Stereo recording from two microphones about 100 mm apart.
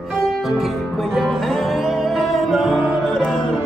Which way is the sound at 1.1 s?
Centre (ahead or behind).